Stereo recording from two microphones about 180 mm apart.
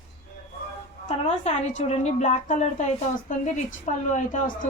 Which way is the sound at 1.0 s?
40° left (ahead or behind).